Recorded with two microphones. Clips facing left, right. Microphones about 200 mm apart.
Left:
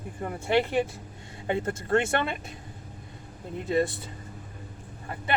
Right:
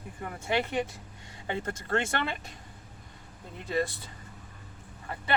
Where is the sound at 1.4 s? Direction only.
25° left (ahead or behind).